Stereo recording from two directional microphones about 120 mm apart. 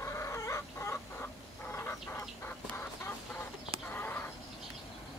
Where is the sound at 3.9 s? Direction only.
15° left (ahead or behind).